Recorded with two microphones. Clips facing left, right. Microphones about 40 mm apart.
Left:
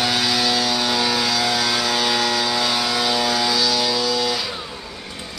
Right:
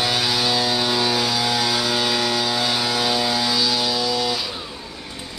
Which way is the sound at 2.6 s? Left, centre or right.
Centre.